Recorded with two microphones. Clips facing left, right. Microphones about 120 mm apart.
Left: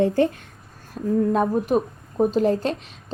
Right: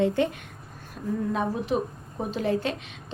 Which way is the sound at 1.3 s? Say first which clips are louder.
Left 6 dB; 45° left (ahead or behind).